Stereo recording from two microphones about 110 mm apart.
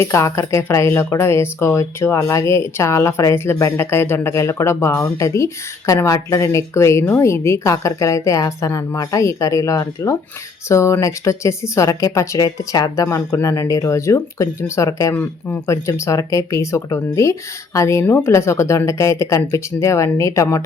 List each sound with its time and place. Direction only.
0.0 s speech: 25° left (ahead or behind)